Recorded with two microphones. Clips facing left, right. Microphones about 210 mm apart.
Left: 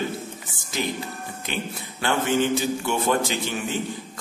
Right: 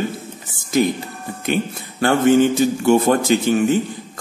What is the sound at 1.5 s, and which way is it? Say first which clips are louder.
Speech: right 11 dB; 50° right (ahead or behind).